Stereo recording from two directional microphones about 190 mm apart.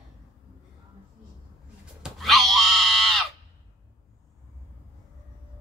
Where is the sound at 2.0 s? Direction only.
Centre (ahead or behind).